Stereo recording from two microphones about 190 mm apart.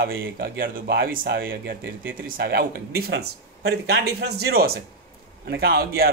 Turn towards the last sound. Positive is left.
turn(degrees=-55)  # may be behind; listen again after turning